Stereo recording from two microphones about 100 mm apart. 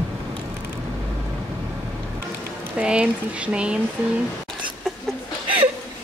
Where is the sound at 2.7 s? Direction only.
10° right (ahead or behind).